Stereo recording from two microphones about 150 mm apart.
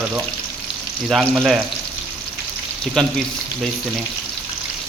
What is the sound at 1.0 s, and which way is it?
Speech, centre (ahead or behind).